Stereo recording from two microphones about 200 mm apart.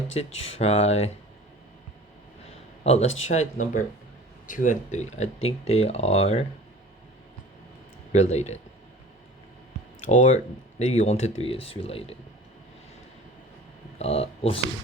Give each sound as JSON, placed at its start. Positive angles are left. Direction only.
{"t": 0.1, "sound": "speech", "side_deg": 30}
{"t": 2.8, "sound": "speech", "side_deg": 30}
{"t": 8.1, "sound": "speech", "side_deg": 35}
{"t": 10.0, "sound": "speech", "side_deg": 35}
{"t": 14.0, "sound": "speech", "side_deg": 30}